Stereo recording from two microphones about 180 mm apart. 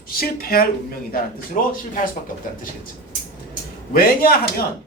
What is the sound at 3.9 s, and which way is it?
Speech, 55° left (ahead or behind).